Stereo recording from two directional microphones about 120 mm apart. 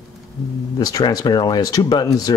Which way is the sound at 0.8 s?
30° left (ahead or behind).